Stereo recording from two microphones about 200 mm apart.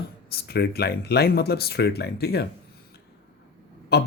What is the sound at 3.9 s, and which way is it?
Speech, 50° left (ahead or behind).